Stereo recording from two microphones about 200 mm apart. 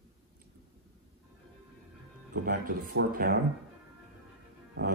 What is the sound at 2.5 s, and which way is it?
Speech, 45° right (ahead or behind).